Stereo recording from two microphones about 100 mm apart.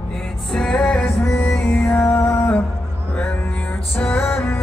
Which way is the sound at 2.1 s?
30° left (ahead or behind).